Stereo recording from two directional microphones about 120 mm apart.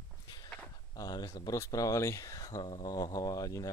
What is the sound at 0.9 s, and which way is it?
Speech, 35° left (ahead or behind).